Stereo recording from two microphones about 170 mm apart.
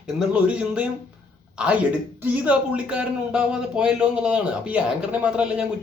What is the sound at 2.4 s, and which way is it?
A man's voice, 5° right (ahead or behind).